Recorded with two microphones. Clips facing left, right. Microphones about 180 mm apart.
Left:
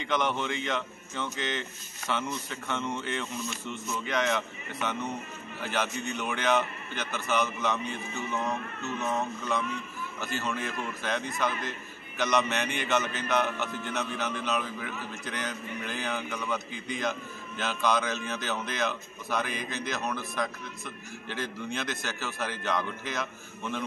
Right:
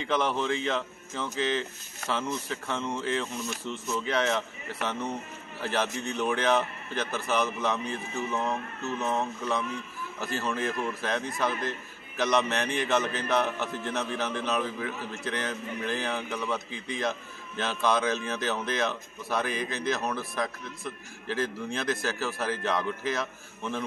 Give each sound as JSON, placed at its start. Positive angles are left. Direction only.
{"t": 0.0, "sound": "a man's voice", "side_deg": -30}